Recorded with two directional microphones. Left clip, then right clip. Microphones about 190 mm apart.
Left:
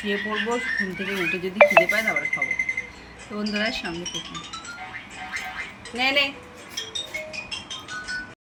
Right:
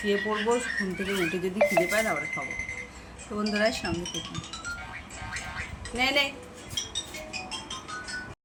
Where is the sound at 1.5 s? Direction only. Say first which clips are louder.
Left 8 dB; 5° right (ahead or behind).